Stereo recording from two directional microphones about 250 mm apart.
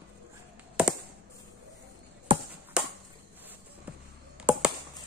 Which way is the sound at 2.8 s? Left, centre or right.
Centre.